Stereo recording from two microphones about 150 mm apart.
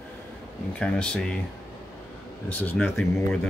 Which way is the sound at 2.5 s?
10° left (ahead or behind).